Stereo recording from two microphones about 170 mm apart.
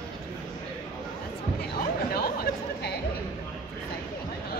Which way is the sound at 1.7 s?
65° left (ahead or behind).